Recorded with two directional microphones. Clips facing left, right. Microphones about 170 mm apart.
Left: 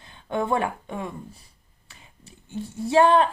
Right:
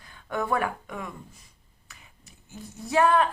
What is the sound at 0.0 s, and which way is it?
Speech, 25° left (ahead or behind).